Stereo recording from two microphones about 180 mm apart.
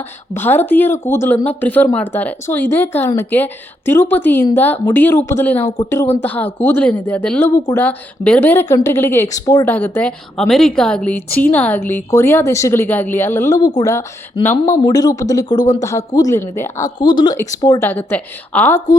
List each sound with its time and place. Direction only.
0.3 s a woman's voice: 10° left (ahead or behind)
14.6 s a woman's voice: 25° left (ahead or behind)